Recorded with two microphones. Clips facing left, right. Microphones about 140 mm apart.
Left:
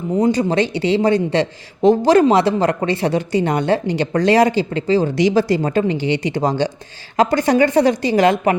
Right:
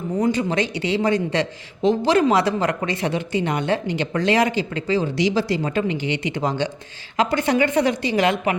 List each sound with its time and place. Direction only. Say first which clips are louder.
0.1 s a woman's voice: left 5 dB; 35° left (ahead or behind)
1.8 s a man's voice: left 6 dB; 45° left (ahead or behind)
2.3 s a woman's voice: left 4 dB; 30° left (ahead or behind)
5.0 s a woman's voice: left 5 dB; 50° left (ahead or behind)